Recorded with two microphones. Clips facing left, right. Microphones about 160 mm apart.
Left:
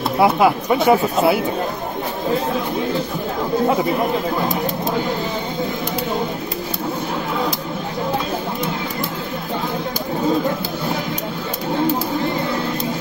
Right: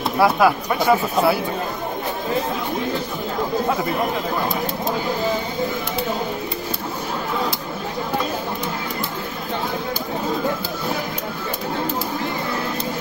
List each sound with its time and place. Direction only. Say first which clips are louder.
0.2 s speech: left 1 dB; 20° left (ahead or behind)